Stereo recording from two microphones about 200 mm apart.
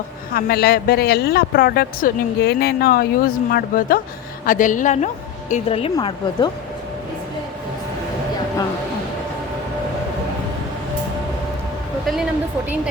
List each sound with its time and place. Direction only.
0.3 s a woman's voice: 50° left (ahead or behind); by 6.5 s 25° left (ahead or behind)